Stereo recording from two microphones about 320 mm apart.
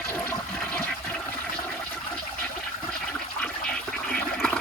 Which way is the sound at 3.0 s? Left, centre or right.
Centre.